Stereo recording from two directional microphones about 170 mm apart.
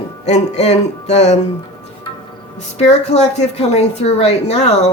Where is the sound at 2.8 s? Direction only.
40° left (ahead or behind).